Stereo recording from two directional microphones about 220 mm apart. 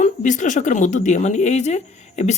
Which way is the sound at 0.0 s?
35° left (ahead or behind).